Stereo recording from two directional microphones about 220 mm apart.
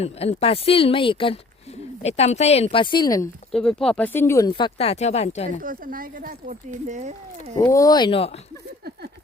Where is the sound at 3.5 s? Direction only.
Centre (ahead or behind); by 5.6 s 30° left (ahead or behind).